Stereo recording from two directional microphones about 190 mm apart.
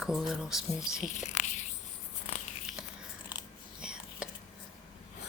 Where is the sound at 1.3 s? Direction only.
40° left (ahead or behind).